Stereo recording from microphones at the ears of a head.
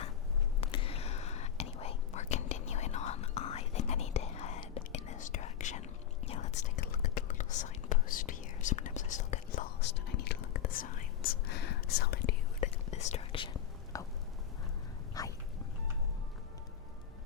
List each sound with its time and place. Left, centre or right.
0.6 s whispering: left